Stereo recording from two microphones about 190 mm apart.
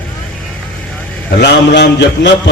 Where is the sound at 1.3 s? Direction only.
60° left (ahead or behind).